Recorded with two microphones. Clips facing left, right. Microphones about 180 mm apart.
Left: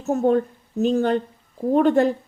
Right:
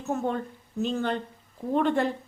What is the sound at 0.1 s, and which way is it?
Speech, 45° left (ahead or behind).